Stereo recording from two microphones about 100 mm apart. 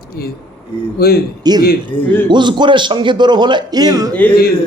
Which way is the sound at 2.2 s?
50° right (ahead or behind).